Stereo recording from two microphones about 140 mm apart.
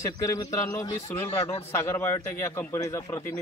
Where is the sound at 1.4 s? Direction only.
45° left (ahead or behind).